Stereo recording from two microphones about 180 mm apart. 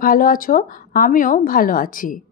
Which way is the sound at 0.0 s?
50° left (ahead or behind).